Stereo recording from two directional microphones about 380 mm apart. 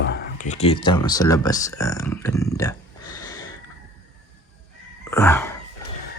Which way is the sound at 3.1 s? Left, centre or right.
Centre.